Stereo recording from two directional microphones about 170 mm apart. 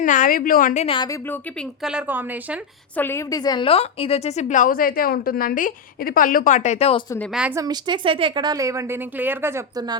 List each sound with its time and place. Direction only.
0.0 s a woman's voice: 50° left (ahead or behind)
0.9 s speech: 20° left (ahead or behind)
1.5 s speech: 5° right (ahead or behind)
2.9 s a woman's voice: 10° left (ahead or behind); by 7.0 s 40° left (ahead or behind)
7.5 s a woman's voice: 25° right (ahead or behind)